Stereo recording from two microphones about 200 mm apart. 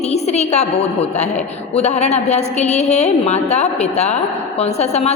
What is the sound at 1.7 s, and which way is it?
A woman's voice, 35° left (ahead or behind).